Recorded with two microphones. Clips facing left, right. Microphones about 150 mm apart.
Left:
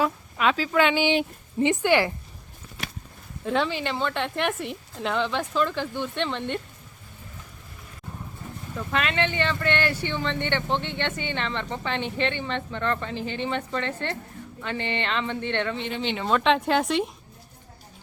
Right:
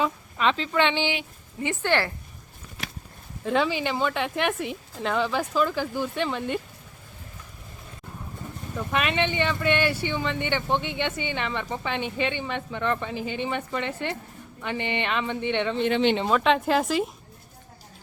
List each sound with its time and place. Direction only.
0.0 s speech: 5° left (ahead or behind)
3.4 s speech: centre (ahead or behind)
8.7 s speech: 15° right (ahead or behind)
15.9 s speech: 70° right (ahead or behind)
16.3 s speech: centre (ahead or behind)